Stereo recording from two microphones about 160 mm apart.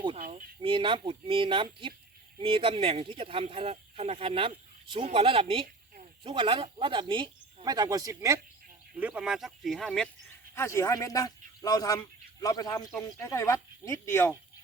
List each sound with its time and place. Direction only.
0.2 s a sound: 55° right (ahead or behind)
0.6 s speech: 30° right (ahead or behind)
9.0 s speech: 10° right (ahead or behind)
10.2 s a man's voice: 15° left (ahead or behind)